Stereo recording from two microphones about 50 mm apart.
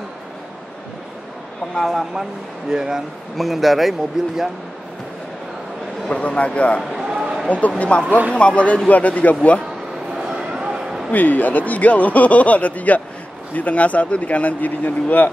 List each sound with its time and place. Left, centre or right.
1.8 s speech: centre
2.7 s speech: centre
3.3 s speech: centre
4.2 s speech: centre
6.0 s speech: left
7.0 s a sound: centre
7.9 s speech: left
10.3 s a sound: centre
11.1 s speech: left